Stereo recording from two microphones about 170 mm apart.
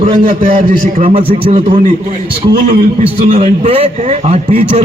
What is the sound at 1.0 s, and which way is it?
Speech, 35° right (ahead or behind).